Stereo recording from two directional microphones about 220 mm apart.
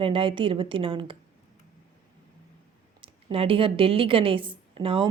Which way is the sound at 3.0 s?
25° right (ahead or behind).